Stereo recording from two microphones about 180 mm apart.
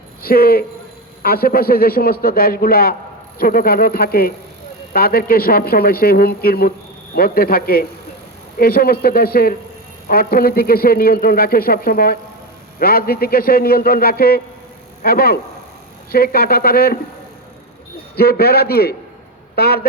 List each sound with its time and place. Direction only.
0.2 s a man's voice: 55° left (ahead or behind)
18.2 s a man's voice: 60° left (ahead or behind)